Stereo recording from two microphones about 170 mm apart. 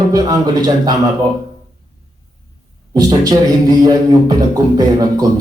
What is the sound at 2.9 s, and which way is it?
Speech, 20° right (ahead or behind).